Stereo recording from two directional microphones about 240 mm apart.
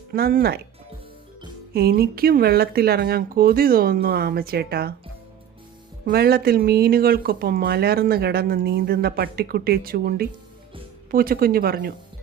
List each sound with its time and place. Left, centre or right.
0.1 s speech: right
1.7 s speech: right
6.1 s speech: right